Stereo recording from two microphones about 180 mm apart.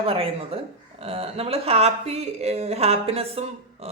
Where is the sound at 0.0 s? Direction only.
30° right (ahead or behind).